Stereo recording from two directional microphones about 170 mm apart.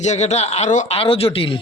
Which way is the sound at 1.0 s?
35° left (ahead or behind).